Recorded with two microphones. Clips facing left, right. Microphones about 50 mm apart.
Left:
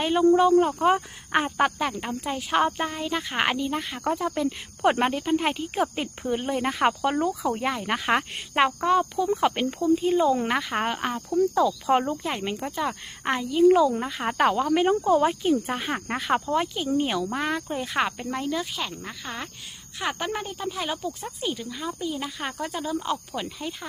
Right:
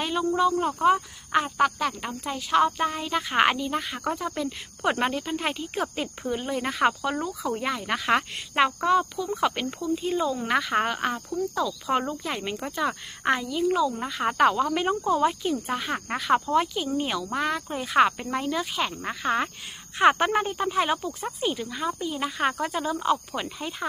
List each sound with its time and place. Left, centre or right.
0.3 s speech: centre
1.9 s speech: centre
2.8 s speech: centre
4.4 s speech: centre
7.0 s speech: left
7.5 s speech: centre
13.5 s speech: centre
14.0 s speech: centre
18.8 s speech: centre